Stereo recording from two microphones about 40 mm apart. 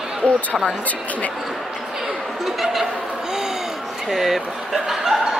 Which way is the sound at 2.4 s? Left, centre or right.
Centre.